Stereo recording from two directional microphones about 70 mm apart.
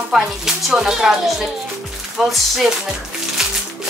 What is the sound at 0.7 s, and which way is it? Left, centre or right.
Speech, centre.